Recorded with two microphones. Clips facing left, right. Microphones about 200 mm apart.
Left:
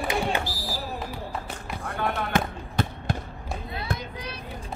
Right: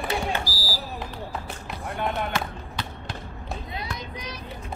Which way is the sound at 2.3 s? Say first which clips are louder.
Left 4 dB; 50° left (ahead or behind).